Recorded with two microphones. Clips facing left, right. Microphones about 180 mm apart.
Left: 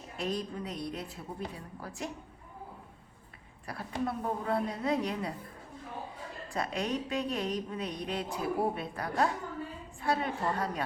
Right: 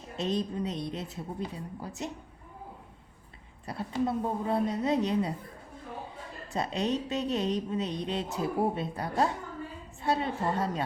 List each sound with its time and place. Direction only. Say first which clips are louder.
0.2 s speech: right 4 dB; 20° right (ahead or behind)
3.7 s speech: right 4 dB; 20° right (ahead or behind)
6.5 s speech: right 3 dB; 25° right (ahead or behind)